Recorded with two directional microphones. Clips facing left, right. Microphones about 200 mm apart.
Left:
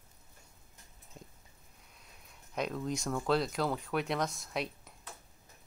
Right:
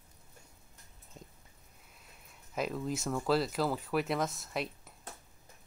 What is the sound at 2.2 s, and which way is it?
Speech, 5° right (ahead or behind).